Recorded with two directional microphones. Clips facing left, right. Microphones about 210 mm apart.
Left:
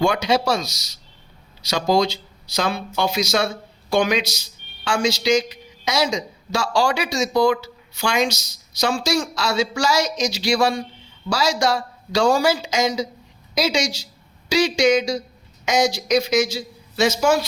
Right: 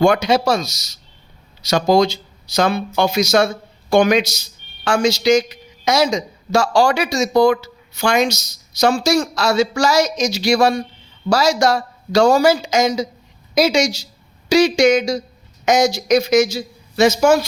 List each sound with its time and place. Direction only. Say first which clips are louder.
0.0 s a man's voice: right 5 dB; 45° right (ahead or behind)